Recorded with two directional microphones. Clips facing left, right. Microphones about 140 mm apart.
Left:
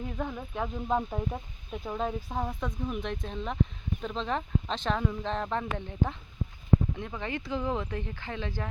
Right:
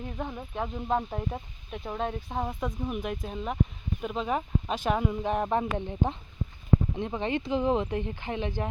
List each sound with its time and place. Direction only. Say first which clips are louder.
0.2 s speech: even; 10° right (ahead or behind)